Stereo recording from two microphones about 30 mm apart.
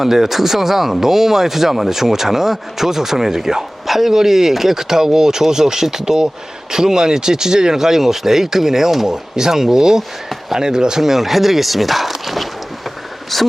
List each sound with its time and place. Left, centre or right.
0.0 s speech: centre
11.0 s speech: centre
13.3 s speech: centre